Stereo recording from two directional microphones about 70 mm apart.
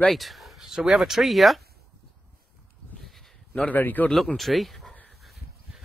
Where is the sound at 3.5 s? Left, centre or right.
Left.